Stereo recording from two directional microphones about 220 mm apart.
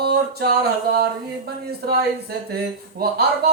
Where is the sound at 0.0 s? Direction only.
45° right (ahead or behind).